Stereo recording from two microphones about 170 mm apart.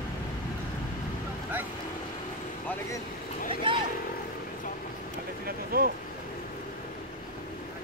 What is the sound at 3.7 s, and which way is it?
Vehicle, 30° right (ahead or behind).